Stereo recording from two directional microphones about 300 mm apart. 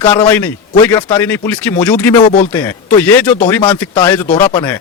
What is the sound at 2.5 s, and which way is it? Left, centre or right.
Speech, centre.